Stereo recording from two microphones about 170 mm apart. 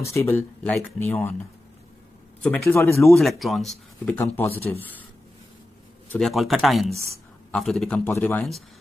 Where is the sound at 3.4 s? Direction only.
Centre (ahead or behind).